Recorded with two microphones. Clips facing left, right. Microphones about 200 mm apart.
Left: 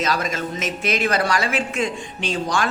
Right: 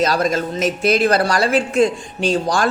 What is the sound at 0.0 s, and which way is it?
A man's voice, 35° right (ahead or behind).